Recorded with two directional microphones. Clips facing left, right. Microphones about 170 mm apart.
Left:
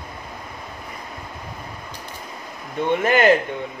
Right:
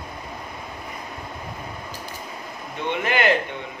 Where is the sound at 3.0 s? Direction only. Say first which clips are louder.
Left 5 dB; 45° left (ahead or behind).